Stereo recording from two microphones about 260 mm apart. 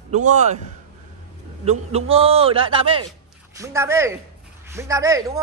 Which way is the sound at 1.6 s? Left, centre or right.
Right.